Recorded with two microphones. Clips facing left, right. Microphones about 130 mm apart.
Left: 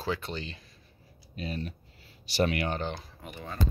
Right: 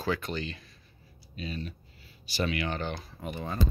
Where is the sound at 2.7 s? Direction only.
30° left (ahead or behind).